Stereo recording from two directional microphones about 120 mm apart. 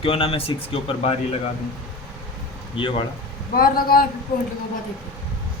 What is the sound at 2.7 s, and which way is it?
Speech, 45° left (ahead or behind).